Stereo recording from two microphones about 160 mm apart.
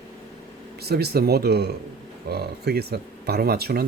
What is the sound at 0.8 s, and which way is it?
Speech, 90° right.